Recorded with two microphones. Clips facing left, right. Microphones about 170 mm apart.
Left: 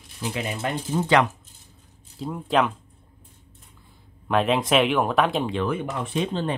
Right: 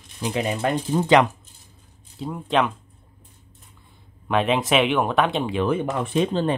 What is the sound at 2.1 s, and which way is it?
Speech, centre (ahead or behind).